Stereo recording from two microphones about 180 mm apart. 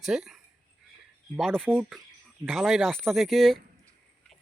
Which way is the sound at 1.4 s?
5° left (ahead or behind).